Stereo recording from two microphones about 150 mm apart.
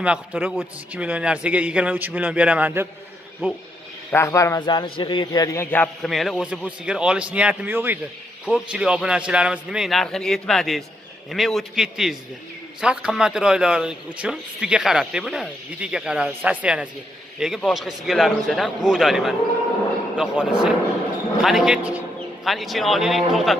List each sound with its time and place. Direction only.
0.0 s a man's voice: 10° right (ahead or behind)
4.1 s a man's voice: 20° left (ahead or behind)
6.0 s a man's voice: centre (ahead or behind)